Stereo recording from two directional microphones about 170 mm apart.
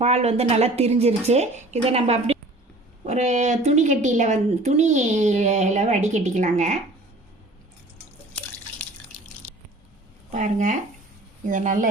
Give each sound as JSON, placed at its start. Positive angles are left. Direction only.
{"t": 0.0, "sound": "a woman's voice", "side_deg": -40}
{"t": 10.3, "sound": "a woman's voice", "side_deg": -45}